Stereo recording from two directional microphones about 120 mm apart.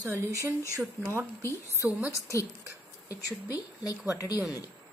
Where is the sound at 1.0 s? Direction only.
15° left (ahead or behind).